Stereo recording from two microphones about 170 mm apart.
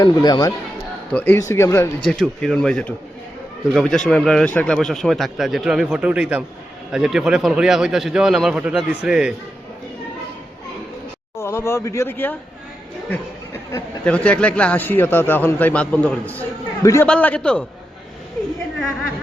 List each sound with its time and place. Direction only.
0.0 s speech: 25° left (ahead or behind)
1.1 s a man's voice: 10° left (ahead or behind)
2.0 s speech: 5° left (ahead or behind)
11.3 s speech: 15° left (ahead or behind)
13.1 s a sound: 15° left (ahead or behind)
14.0 s a man's voice: 5° left (ahead or behind)